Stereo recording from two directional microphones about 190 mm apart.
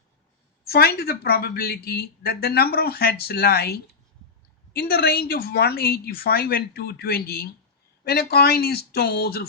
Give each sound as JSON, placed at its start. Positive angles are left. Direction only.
{"t": 0.6, "sound": "a woman's voice", "side_deg": 55}